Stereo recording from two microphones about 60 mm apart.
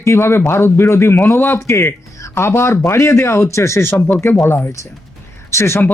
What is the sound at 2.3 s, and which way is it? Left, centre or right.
A man's voice, left.